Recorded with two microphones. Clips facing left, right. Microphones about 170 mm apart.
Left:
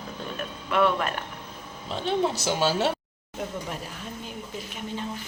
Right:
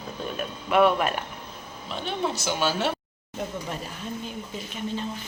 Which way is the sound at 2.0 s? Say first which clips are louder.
Left 3 dB; 35° left (ahead or behind).